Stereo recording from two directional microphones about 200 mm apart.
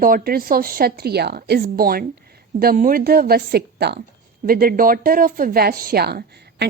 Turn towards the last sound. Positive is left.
turn(degrees=-55)  # may be behind; listen again after turning